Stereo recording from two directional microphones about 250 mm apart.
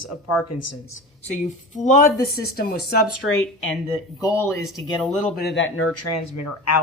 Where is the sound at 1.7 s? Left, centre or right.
Left.